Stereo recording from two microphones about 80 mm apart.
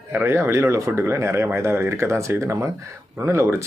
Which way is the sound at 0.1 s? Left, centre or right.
Right.